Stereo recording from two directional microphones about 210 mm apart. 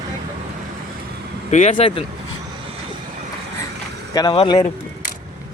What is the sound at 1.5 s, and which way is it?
Speech, 35° left (ahead or behind).